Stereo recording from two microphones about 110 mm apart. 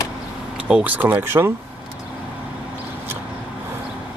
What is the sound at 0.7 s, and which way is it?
Speech, 15° right (ahead or behind).